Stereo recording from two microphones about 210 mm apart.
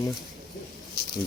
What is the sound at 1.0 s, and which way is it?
Speech, 50° left (ahead or behind).